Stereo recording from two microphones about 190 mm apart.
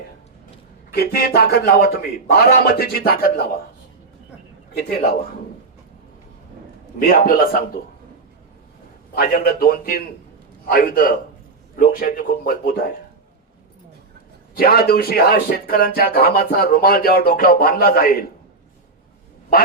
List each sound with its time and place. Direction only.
0.9 s speech: 55° left (ahead or behind)
4.7 s speech: 50° left (ahead or behind)
7.0 s speech: 50° left (ahead or behind)
9.1 s speech: 50° left (ahead or behind)
14.5 s speech: 55° left (ahead or behind)